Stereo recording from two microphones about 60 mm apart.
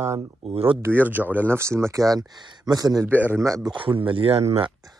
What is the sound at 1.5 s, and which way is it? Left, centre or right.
Speech, right.